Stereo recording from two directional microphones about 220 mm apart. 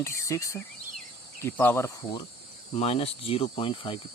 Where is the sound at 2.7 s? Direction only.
25° left (ahead or behind).